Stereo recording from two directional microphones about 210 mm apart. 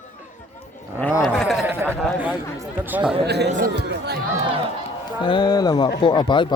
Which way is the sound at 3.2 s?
50° right (ahead or behind).